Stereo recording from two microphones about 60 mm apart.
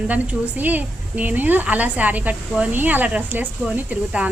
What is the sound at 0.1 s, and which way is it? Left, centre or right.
A woman's voice, right.